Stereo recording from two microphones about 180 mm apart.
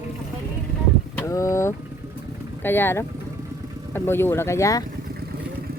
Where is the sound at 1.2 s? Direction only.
15° left (ahead or behind).